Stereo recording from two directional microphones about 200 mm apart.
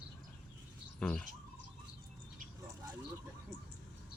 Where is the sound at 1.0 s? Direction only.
5° left (ahead or behind).